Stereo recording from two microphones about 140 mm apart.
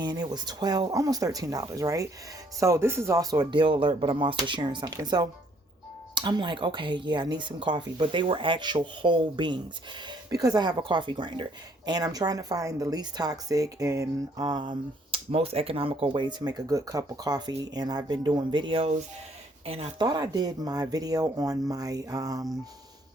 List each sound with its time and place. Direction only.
0.0 s a woman's voice: 30° right (ahead or behind); by 19.9 s 45° right (ahead or behind)
20.0 s speech: 30° right (ahead or behind)